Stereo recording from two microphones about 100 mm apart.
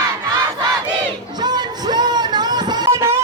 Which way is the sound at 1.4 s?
45° right (ahead or behind).